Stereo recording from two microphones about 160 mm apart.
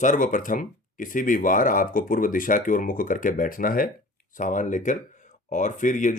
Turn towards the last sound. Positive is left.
turn(degrees=50)  # may be behind; listen again after turning